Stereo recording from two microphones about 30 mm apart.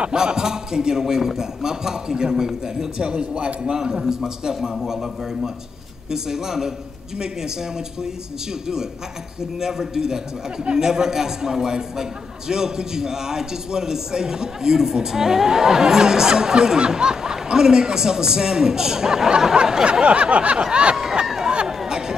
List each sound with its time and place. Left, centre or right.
0.1 s a man's voice: right
3.0 s speech: right
3.7 s a man's voice: centre
9.6 s a man's voice: centre; by 20.5 s right
20.9 s a sound: right